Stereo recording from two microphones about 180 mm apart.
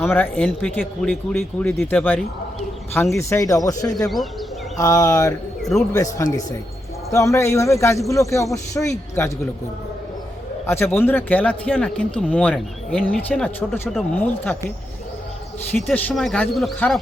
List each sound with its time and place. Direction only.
0.0 s speech: 10° left (ahead or behind)
10.7 s speech: 10° left (ahead or behind)
15.7 s speech: 10° left (ahead or behind)